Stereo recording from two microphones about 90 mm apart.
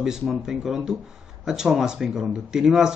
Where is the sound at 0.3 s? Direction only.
5° right (ahead or behind).